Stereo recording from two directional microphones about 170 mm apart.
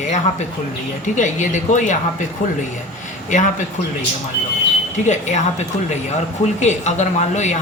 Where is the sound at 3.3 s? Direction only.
45° left (ahead or behind).